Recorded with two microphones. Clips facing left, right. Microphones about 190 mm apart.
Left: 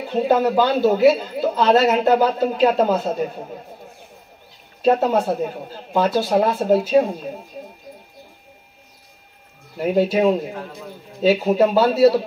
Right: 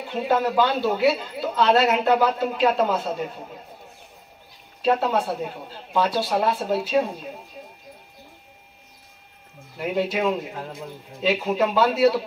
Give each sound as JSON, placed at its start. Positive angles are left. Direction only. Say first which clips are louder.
{"t": 0.1, "sound": "a woman's voice", "louder": "left 5 dB", "side_deg": 40}
{"t": 4.8, "sound": "speech", "louder": "left 5 dB", "side_deg": 45}
{"t": 9.8, "sound": "a woman's voice", "louder": "left 6 dB", "side_deg": 40}